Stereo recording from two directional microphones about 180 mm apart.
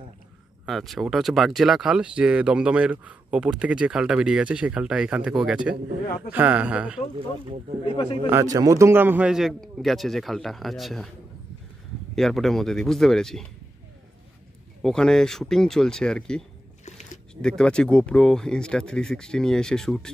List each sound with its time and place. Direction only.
0.7 s speech: centre (ahead or behind)
7.8 s a man's voice: 30° left (ahead or behind)
8.3 s speech: 15° right (ahead or behind); by 11.1 s centre (ahead or behind)
12.2 s speech: centre (ahead or behind)
14.8 s speech: 5° left (ahead or behind)
16.8 s a sound: 40° left (ahead or behind)
17.4 s speech: 5° left (ahead or behind)